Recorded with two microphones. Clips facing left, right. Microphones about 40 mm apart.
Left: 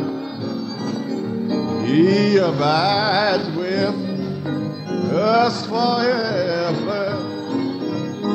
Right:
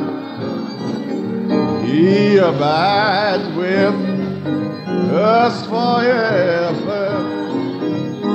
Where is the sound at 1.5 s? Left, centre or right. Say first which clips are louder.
Right 4 dB; right.